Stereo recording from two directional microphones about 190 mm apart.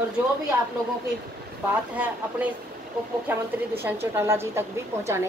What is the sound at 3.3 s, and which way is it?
A woman's voice, 10° right (ahead or behind).